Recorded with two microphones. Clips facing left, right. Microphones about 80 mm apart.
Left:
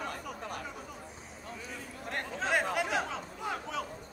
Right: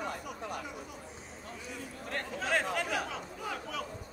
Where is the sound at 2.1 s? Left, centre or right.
Left.